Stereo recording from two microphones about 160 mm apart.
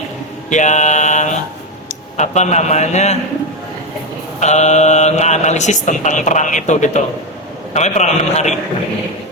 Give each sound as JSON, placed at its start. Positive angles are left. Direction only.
{"t": 0.5, "sound": "mantra", "side_deg": 50}
{"t": 1.9, "sound": "speech", "side_deg": 50}
{"t": 4.4, "sound": "speech", "side_deg": 45}